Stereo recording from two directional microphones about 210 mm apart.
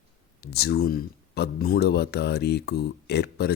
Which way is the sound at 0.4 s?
50° left (ahead or behind).